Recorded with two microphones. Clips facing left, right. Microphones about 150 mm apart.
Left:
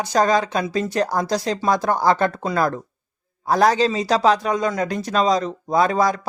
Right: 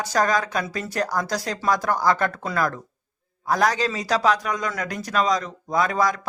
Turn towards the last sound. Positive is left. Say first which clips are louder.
# left 4 dB
turn(degrees=30)  # may be behind; listen again after turning